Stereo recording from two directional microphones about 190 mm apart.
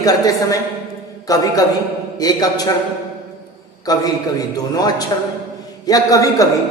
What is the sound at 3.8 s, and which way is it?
A woman's voice, 20° left (ahead or behind).